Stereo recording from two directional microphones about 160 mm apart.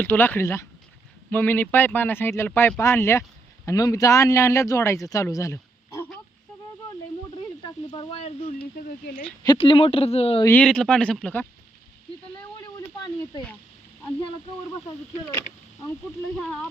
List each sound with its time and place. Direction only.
0.0 s a man's voice: 10° left (ahead or behind)
7.6 s a sound: 30° left (ahead or behind)
9.6 s speech: 35° left (ahead or behind)
10.4 s speech: 10° left (ahead or behind)